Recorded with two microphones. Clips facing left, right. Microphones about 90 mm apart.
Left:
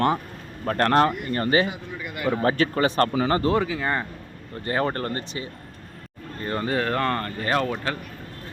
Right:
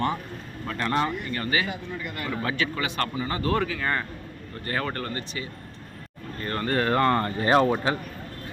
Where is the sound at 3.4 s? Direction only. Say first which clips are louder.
Left 3 dB; 15° left (ahead or behind); by 5.4 s 35° left (ahead or behind).